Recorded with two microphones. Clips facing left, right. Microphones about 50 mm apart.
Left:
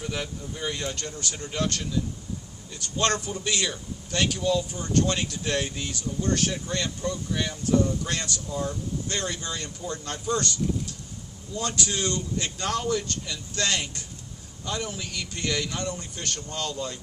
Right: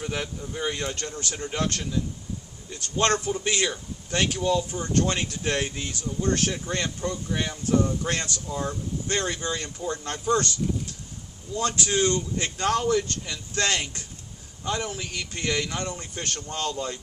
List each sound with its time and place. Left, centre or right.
0.1 s a man's voice: right
11.5 s a man's voice: right